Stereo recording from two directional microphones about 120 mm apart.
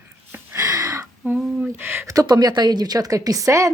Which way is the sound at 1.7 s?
20° right (ahead or behind).